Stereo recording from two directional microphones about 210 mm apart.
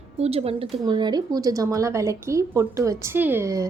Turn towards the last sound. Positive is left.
turn(degrees=-15)  # may be behind; listen again after turning